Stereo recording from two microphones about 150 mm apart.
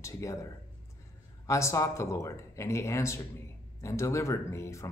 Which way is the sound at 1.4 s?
20° left (ahead or behind).